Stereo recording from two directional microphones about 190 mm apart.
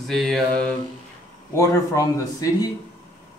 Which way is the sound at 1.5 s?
15° left (ahead or behind).